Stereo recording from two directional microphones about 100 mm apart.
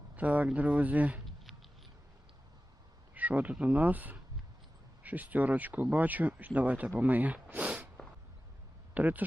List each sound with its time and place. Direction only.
0.2 s speech: 15° right (ahead or behind)
3.2 s speech: 15° right (ahead or behind)
9.0 s speech: 15° right (ahead or behind)